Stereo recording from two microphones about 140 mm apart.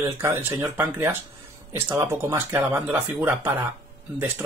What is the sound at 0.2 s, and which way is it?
Speech, 15° right (ahead or behind).